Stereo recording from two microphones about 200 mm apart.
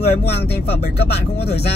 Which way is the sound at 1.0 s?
55° left (ahead or behind).